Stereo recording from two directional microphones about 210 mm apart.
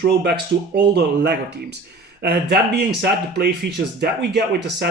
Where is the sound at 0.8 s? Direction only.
50° right (ahead or behind).